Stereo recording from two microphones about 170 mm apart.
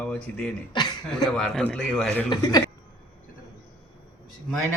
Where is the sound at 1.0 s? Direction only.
5° left (ahead or behind).